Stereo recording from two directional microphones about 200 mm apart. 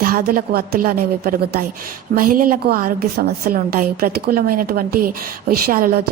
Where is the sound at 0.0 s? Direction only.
45° right (ahead or behind).